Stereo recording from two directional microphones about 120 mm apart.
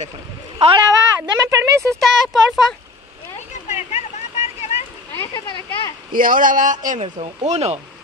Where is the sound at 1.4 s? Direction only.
25° right (ahead or behind).